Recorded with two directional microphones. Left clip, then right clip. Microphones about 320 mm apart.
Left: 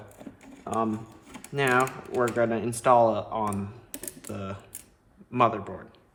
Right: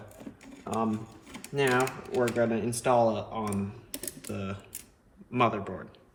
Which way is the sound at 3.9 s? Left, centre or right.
Centre.